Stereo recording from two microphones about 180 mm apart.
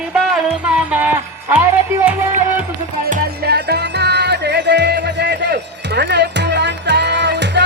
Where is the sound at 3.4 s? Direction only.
65° right (ahead or behind).